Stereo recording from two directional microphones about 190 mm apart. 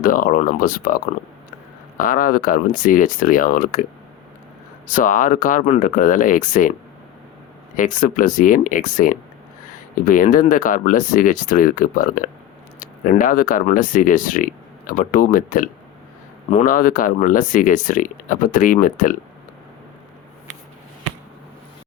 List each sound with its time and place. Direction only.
0.0 s speech: 50° left (ahead or behind)
4.9 s speech: 45° left (ahead or behind)
7.8 s speech: 45° left (ahead or behind)